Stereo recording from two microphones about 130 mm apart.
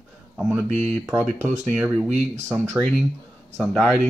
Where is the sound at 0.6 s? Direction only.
65° right (ahead or behind).